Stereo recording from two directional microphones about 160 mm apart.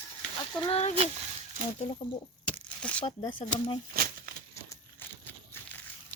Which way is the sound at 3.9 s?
65° right (ahead or behind).